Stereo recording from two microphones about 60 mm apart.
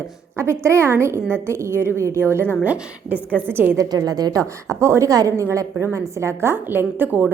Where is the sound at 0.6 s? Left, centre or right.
Right.